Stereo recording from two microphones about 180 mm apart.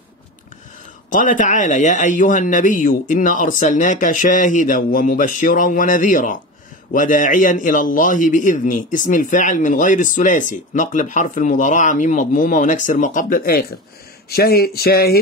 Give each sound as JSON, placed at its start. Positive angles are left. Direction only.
{"t": 1.1, "sound": "a man's voice", "side_deg": 45}